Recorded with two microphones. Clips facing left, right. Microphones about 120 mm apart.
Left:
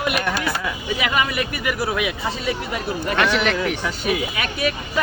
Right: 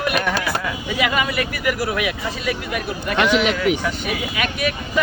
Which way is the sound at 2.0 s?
25° left (ahead or behind).